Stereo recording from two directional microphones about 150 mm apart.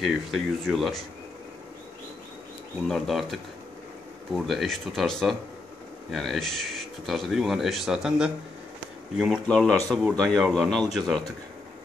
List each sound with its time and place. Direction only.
0.0 s speech: centre (ahead or behind)
2.9 s speech: centre (ahead or behind)